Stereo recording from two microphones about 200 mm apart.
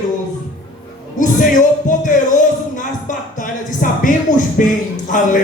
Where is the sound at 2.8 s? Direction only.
40° left (ahead or behind).